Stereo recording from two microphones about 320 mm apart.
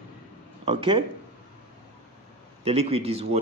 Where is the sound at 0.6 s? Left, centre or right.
Centre.